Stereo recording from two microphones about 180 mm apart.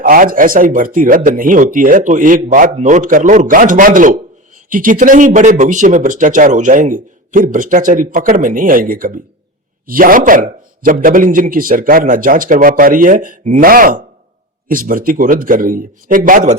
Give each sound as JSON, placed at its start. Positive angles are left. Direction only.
{"t": 0.0, "sound": "speech", "side_deg": -50}